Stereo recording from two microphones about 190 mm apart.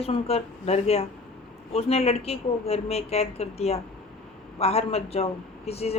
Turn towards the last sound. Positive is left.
turn(degrees=30)  # may be behind; listen again after turning